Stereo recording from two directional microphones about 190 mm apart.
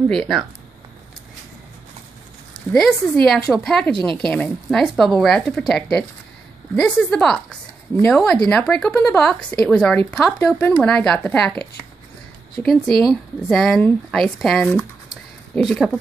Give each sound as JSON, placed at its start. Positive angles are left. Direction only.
{"t": 0.1, "sound": "speech", "side_deg": 0}
{"t": 2.7, "sound": "speech", "side_deg": 0}
{"t": 3.9, "sound": "speech", "side_deg": -25}
{"t": 4.3, "sound": "speech", "side_deg": 5}
{"t": 12.6, "sound": "speech", "side_deg": 0}
{"t": 15.0, "sound": "a sound", "side_deg": 0}